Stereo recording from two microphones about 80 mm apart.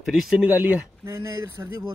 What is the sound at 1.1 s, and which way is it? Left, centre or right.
Speech, right.